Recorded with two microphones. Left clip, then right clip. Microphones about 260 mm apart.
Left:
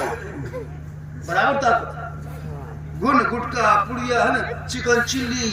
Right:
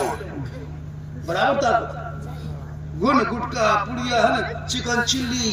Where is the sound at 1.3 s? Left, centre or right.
Right.